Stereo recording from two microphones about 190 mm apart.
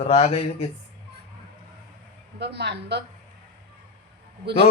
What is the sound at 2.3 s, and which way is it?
Speech, 60° right (ahead or behind).